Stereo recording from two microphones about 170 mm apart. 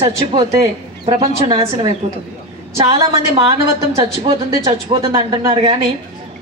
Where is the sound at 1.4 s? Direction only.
30° right (ahead or behind).